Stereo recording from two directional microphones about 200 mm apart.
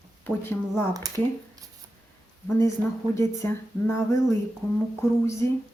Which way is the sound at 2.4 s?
15° left (ahead or behind).